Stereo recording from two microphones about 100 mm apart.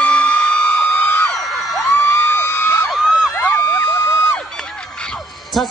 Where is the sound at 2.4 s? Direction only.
25° left (ahead or behind).